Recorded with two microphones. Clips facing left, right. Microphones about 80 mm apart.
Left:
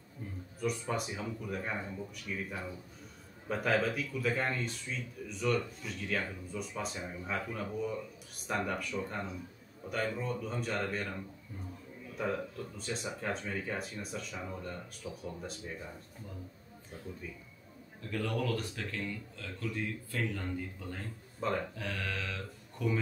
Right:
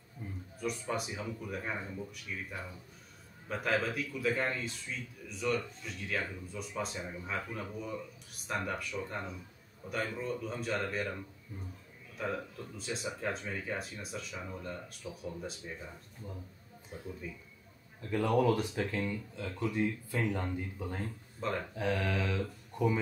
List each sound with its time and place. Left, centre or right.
0.2 s a sound: centre
0.6 s speech: centre
12.2 s speech: centre
16.9 s speech: centre
18.1 s speech: centre
21.4 s speech: centre
21.7 s speech: centre